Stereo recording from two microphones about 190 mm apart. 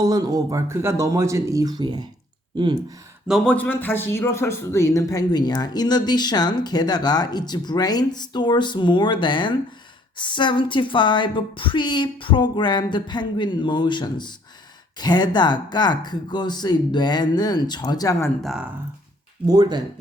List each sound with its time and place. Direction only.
0.0 s speech: 20° right (ahead or behind)
3.2 s a man's voice: centre (ahead or behind); by 18.3 s 20° left (ahead or behind)
18.4 s speech: 5° right (ahead or behind)
19.5 s speech: 20° right (ahead or behind)